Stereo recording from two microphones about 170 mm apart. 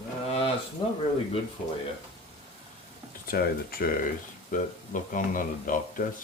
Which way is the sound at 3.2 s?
60° left (ahead or behind).